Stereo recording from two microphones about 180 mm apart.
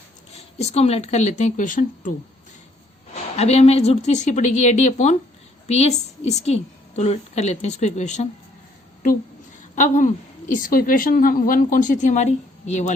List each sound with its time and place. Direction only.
0.3 s a woman's voice: 35° left (ahead or behind)
3.3 s a woman's voice: 35° left (ahead or behind)
9.7 s a woman's voice: 45° left (ahead or behind)